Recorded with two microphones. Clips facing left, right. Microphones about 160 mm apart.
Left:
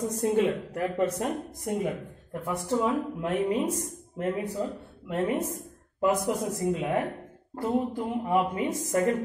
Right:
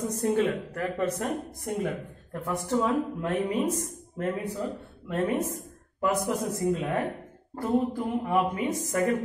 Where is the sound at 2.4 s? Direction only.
20° left (ahead or behind).